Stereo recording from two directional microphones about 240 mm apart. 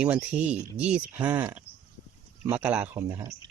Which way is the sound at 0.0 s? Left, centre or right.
Centre.